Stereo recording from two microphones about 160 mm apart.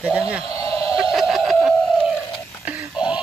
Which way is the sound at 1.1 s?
Centre (ahead or behind).